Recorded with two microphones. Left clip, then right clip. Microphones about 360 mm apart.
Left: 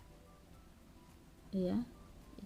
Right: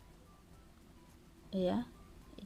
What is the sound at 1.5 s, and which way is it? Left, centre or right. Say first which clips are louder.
Speech: right 3 dB; centre.